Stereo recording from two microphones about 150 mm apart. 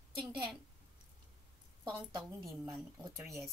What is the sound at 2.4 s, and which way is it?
Speech, centre (ahead or behind).